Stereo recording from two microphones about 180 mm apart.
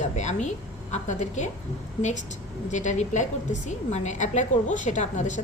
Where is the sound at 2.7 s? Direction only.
40° left (ahead or behind).